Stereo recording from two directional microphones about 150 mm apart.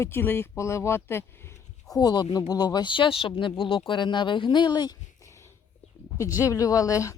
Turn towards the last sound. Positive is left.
turn(degrees=20)  # may be behind; listen again after turning